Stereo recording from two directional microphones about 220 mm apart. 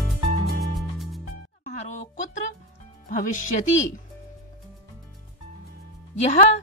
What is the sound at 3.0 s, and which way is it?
Speech, 35° left (ahead or behind).